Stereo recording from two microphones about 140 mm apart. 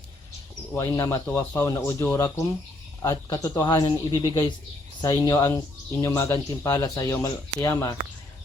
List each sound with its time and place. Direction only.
0.7 s speech: 20° left (ahead or behind)